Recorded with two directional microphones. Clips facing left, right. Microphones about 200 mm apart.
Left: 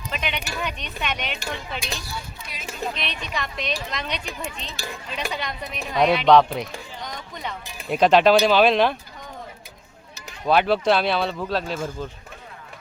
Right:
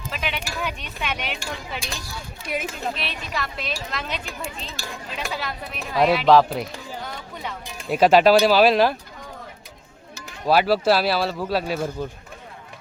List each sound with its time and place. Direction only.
0.1 s a sound: 5° right (ahead or behind)
0.6 s speech: 5° right (ahead or behind)
2.5 s speech: 55° right (ahead or behind)
2.9 s speech: 5° right (ahead or behind)
10.4 s speech: 5° right (ahead or behind)